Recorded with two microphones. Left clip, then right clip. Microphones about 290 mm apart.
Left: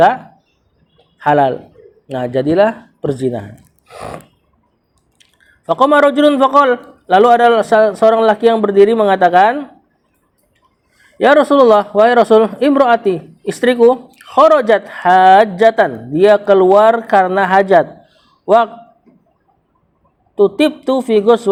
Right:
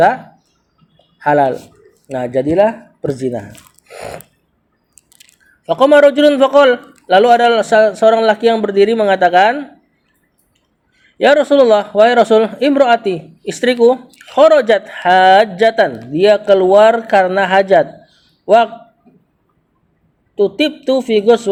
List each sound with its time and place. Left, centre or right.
1.2 s a man's voice: centre
5.6 s a man's voice: centre
11.2 s a man's voice: centre
20.3 s a man's voice: centre